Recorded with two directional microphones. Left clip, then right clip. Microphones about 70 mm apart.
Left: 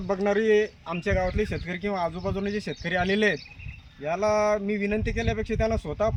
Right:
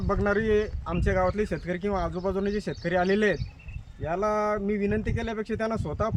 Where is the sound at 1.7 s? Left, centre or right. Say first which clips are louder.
Even; centre.